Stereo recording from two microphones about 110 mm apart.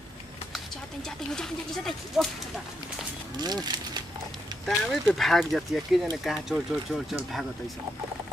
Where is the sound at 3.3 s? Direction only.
40° right (ahead or behind).